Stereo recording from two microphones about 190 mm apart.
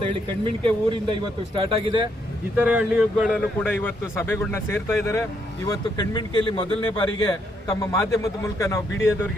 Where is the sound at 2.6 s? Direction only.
5° right (ahead or behind).